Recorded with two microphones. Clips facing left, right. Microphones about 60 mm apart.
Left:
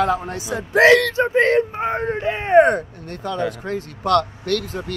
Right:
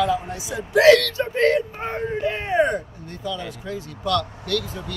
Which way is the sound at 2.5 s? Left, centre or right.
Left.